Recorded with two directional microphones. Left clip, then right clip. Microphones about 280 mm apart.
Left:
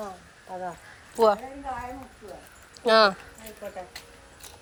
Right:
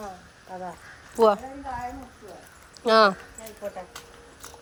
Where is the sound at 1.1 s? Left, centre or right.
Centre.